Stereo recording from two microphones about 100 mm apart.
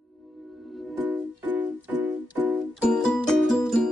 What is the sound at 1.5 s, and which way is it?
Keyboard, 15° right (ahead or behind).